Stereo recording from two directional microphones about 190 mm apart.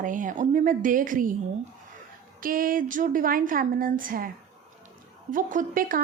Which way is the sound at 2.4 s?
50° right (ahead or behind).